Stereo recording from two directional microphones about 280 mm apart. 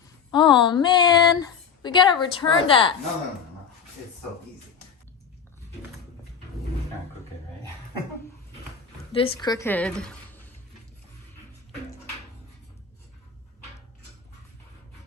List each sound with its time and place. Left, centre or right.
0.3 s speech: centre
9.1 s a woman's voice: centre